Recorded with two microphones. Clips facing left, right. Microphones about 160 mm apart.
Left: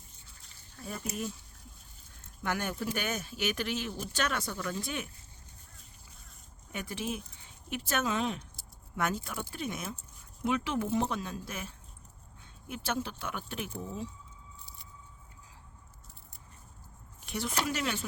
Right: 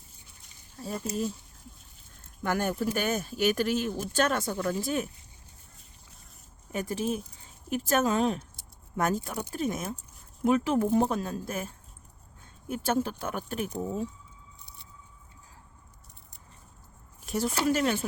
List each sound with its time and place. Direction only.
0.8 s speech: 30° right (ahead or behind)
2.4 s speech: 45° right (ahead or behind)
6.7 s speech: 40° right (ahead or behind)
17.2 s a sound: 40° right (ahead or behind)
17.7 s speech: 45° right (ahead or behind)